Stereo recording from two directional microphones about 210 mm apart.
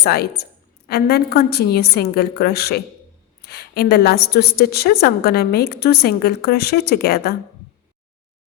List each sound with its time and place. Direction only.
0.0 s a woman's voice: 50° left (ahead or behind)